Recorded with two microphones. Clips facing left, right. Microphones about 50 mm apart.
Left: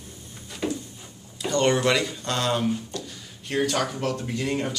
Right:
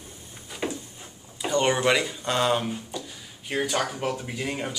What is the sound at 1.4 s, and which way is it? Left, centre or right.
Speech, centre.